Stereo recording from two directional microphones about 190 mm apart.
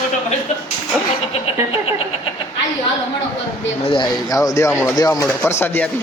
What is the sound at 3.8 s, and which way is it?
Speech, 25° left (ahead or behind).